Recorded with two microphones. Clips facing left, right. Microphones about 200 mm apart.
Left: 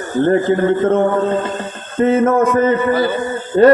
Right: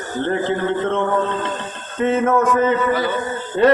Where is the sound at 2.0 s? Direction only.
45° left (ahead or behind).